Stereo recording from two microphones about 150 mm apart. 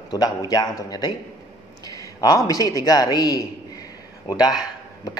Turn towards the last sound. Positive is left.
turn(degrees=25)  # may be behind; listen again after turning